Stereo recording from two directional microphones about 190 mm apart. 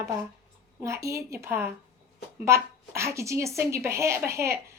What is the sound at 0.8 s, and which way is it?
Speech, 15° right (ahead or behind).